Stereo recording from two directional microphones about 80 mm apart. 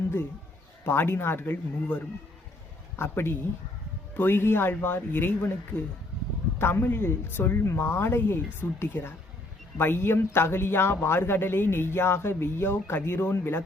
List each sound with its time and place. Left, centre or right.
0.9 s a man's voice: left